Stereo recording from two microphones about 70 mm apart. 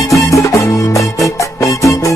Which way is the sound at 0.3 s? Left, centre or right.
Left.